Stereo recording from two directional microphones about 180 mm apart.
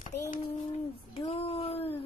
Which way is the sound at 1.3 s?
35° left (ahead or behind).